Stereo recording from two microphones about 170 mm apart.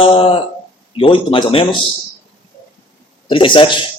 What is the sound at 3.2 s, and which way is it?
Speech, 30° left (ahead or behind).